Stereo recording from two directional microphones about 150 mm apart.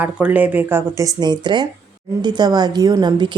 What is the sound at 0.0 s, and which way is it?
A woman's voice, 10° right (ahead or behind).